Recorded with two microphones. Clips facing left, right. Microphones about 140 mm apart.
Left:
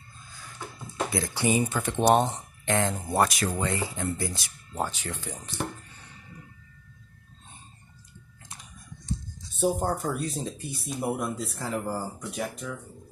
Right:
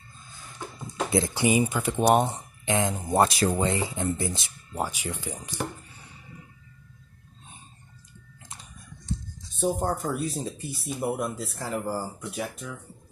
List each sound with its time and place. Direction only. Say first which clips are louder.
1.1 s speech: right 3 dB; 20° right (ahead or behind)
4.7 s speech: right 1 dB; 10° right (ahead or behind)
9.6 s speech: even; centre (ahead or behind)